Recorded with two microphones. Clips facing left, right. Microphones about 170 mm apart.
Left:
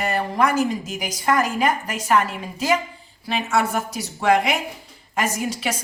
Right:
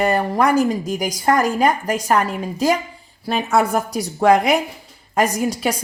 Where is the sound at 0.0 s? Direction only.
45° right (ahead or behind).